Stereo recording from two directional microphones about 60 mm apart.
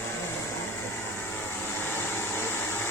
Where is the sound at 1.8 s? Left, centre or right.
Left.